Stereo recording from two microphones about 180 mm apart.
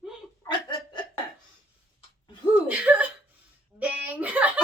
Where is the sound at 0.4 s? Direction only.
25° left (ahead or behind).